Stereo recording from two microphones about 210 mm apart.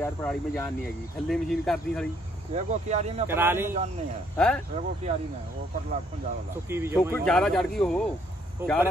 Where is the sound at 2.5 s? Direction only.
30° right (ahead or behind).